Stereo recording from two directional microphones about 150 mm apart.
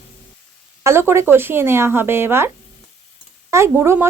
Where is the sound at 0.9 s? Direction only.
15° right (ahead or behind).